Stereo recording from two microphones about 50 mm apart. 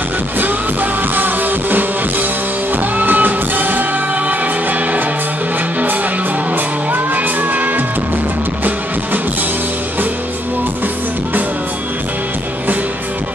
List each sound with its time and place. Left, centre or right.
0.4 s music: right
6.5 s music: right